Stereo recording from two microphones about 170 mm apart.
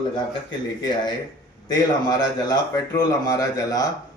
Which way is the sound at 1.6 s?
25° left (ahead or behind).